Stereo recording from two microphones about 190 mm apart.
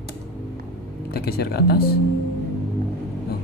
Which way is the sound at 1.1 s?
55° left (ahead or behind).